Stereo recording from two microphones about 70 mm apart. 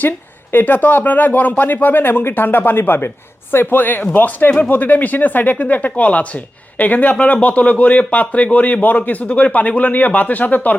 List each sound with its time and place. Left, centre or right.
0.5 s speech: left